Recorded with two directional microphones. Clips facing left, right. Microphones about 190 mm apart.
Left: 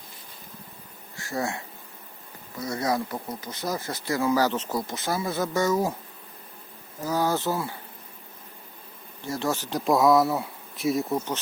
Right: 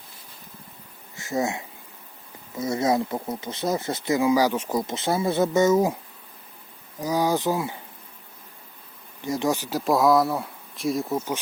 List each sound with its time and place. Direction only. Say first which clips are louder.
1.1 s speech: right 4 dB; 20° right (ahead or behind)
7.0 s speech: right 2 dB; 15° right (ahead or behind)
9.2 s speech: right 4 dB; 15° right (ahead or behind); by 11.3 s centre (ahead or behind)